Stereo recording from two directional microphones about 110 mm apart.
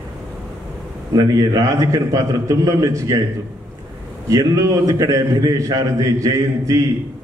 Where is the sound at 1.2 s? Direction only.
30° right (ahead or behind).